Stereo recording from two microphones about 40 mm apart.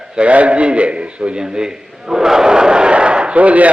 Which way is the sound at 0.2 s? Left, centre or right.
Right.